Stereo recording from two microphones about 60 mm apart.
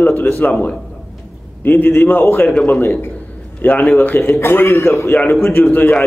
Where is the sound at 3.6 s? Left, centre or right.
Left.